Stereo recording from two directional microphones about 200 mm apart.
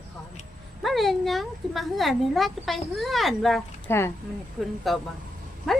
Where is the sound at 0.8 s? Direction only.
Centre (ahead or behind).